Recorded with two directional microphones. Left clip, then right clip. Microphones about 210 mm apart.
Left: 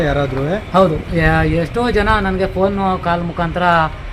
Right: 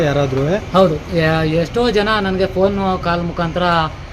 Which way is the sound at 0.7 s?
5° right (ahead or behind).